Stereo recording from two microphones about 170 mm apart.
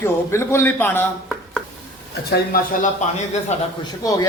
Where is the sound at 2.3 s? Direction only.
65° left (ahead or behind).